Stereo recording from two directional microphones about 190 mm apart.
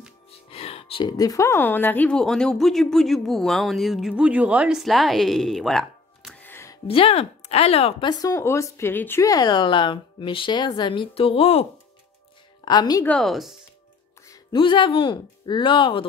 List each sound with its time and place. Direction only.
0.5 s a woman's voice: 30° left (ahead or behind); by 6.8 s 15° left (ahead or behind)
6.9 s speech: 30° left (ahead or behind)
12.6 s speech: 20° left (ahead or behind)
13.0 s speech: 5° left (ahead or behind)
14.2 s speech: 20° left (ahead or behind)